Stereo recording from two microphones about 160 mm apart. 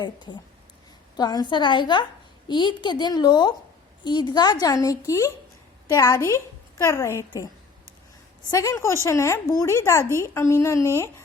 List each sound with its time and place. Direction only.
0.0 s a woman's voice: 25° left (ahead or behind)
8.4 s speech: 20° left (ahead or behind)